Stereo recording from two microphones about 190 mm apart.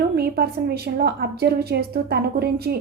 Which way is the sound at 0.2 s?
55° right (ahead or behind).